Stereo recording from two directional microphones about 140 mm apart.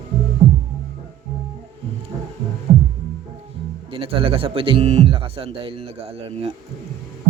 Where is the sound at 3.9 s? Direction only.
40° right (ahead or behind).